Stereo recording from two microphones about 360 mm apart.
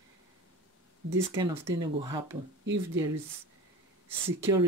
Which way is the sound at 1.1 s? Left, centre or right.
Centre.